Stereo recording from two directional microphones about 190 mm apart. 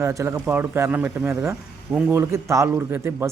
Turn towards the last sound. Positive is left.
turn(degrees=-10)  # may be behind; listen again after turning